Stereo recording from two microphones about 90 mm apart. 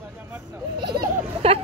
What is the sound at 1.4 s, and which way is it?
Vehicle, 90° right.